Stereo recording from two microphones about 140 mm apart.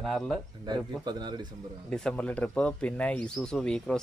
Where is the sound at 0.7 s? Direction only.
30° right (ahead or behind).